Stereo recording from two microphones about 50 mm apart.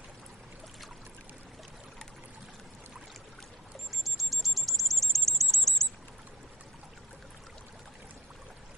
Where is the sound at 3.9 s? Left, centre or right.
Centre.